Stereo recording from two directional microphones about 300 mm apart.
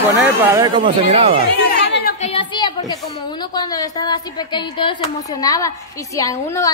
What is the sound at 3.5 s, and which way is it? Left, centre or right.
Speech, centre.